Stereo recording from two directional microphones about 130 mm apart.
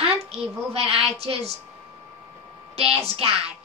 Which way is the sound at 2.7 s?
50° right (ahead or behind).